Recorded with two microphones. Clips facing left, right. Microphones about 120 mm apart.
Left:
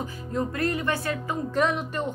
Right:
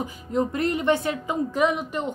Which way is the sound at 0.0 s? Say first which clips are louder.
Right 4 dB; 20° right (ahead or behind).